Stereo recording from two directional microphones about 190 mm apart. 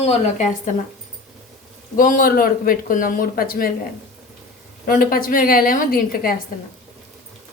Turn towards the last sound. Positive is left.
turn(degrees=50)  # may be behind; listen again after turning